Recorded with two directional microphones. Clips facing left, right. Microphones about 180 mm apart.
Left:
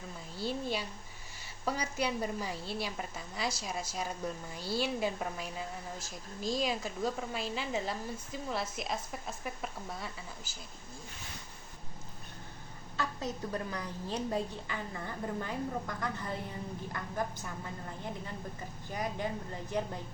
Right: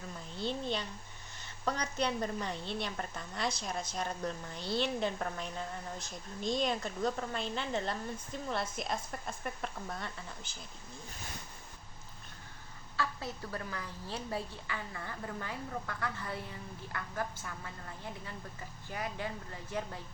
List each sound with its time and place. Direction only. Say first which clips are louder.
0.3 s a woman's voice: left 1 dB; 5° left (ahead or behind)
13.0 s a woman's voice: left 2 dB; 20° left (ahead or behind)